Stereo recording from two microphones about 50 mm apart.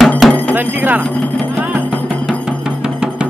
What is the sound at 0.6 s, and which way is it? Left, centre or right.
Speech, right.